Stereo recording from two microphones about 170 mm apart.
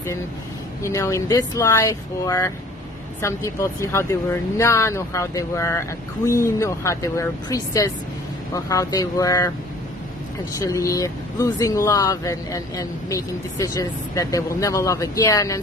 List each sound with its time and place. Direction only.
0.8 s speech: 15° left (ahead or behind)
10.6 s speech: 20° left (ahead or behind)